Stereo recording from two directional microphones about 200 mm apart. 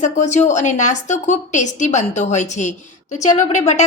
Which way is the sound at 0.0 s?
35° left (ahead or behind).